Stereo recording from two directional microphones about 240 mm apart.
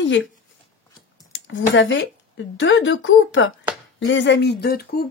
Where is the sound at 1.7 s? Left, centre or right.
Left.